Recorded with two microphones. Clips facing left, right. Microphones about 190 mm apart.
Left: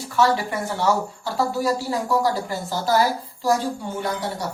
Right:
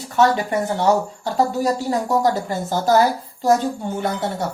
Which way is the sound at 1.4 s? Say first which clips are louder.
Right 3 dB; 40° right (ahead or behind).